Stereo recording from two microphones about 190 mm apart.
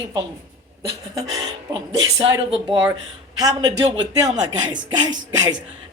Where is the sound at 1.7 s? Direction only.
25° right (ahead or behind).